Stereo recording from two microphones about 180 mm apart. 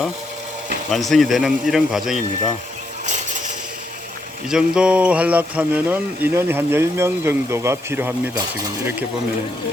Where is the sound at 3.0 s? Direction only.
40° right (ahead or behind).